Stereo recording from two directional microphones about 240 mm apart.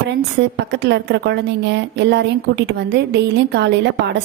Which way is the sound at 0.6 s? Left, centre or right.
Right.